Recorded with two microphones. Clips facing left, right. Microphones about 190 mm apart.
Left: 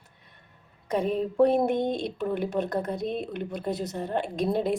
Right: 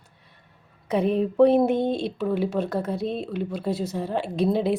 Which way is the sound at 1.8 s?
15° left (ahead or behind).